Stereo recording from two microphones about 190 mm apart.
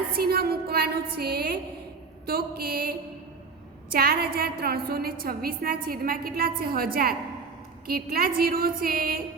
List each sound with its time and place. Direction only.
0.2 s a woman's voice: 55° right (ahead or behind)
3.9 s a woman's voice: 55° right (ahead or behind)